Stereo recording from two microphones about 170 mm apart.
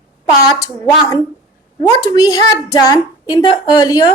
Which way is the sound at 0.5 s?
20° left (ahead or behind).